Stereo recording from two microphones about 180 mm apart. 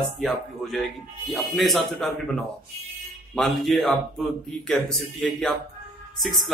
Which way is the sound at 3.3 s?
Centre (ahead or behind).